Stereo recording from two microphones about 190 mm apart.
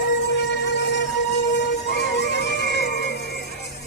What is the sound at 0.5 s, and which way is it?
Music, 65° left (ahead or behind).